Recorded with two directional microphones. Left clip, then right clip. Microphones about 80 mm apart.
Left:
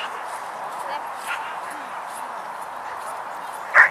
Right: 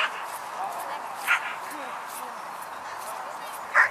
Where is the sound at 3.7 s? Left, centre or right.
Left.